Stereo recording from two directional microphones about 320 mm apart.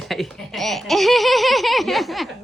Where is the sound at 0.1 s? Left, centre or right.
Centre.